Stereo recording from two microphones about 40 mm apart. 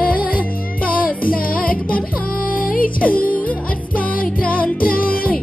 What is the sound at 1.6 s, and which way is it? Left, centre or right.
Music, left.